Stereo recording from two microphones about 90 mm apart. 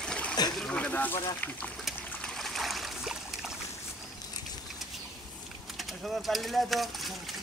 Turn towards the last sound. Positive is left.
turn(degrees=0)  # may be behind; listen again after turning